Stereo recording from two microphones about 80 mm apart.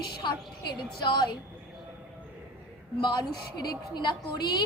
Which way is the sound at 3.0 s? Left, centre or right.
Left.